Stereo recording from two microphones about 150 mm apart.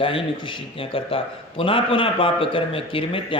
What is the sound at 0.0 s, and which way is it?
Speech, 35° left (ahead or behind).